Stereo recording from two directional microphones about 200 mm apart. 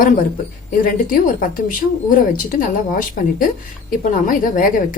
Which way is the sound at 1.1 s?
45° left (ahead or behind).